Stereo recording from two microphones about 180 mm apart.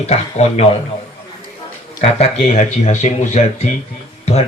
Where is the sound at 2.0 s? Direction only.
40° left (ahead or behind).